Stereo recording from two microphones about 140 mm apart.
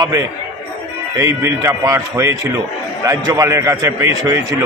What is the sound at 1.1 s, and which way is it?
A man's voice, 20° right (ahead or behind).